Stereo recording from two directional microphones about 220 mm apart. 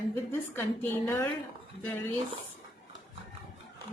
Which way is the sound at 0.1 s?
10° left (ahead or behind).